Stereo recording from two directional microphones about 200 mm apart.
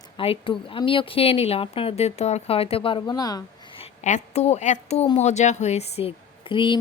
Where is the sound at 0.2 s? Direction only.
25° left (ahead or behind).